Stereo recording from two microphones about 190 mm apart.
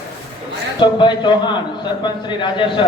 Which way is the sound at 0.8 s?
25° left (ahead or behind).